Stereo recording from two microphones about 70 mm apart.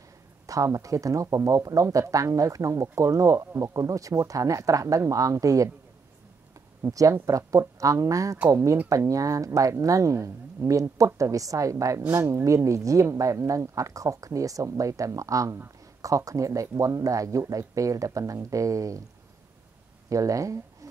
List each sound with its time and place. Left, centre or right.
0.5 s speech: right
6.8 s speech: right
20.1 s speech: right